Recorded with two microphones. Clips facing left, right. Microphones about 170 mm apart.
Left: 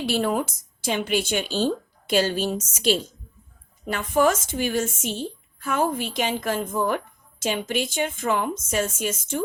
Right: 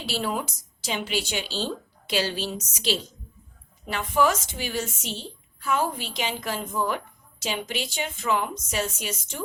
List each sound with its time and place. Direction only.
0.0 s a woman's voice: 55° left (ahead or behind)